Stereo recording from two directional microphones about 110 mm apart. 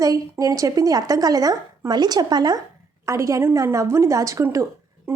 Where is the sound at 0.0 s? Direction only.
30° right (ahead or behind).